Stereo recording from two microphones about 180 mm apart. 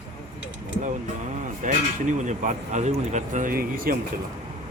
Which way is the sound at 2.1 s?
45° right (ahead or behind).